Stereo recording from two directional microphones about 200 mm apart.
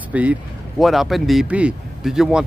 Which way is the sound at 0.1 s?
5° right (ahead or behind).